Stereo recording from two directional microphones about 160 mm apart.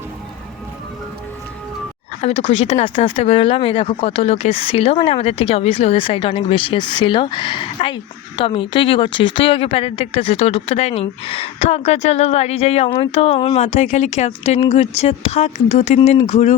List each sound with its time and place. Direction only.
2.2 s speech: 45° left (ahead or behind)